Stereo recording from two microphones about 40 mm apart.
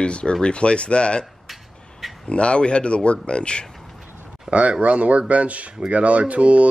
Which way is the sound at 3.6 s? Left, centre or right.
Centre.